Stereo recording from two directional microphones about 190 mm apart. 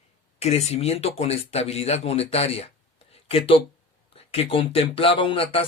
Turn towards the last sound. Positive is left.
turn(degrees=30)  # may be behind; listen again after turning